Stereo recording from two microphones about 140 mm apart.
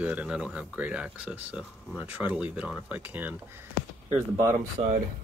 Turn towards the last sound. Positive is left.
turn(degrees=-45)  # may be behind; listen again after turning